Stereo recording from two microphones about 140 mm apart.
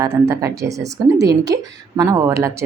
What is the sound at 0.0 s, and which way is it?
A woman's voice, 20° right (ahead or behind).